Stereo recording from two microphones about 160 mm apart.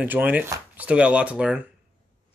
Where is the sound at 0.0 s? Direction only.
10° right (ahead or behind).